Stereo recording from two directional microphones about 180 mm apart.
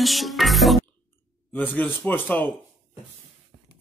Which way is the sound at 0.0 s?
Centre (ahead or behind).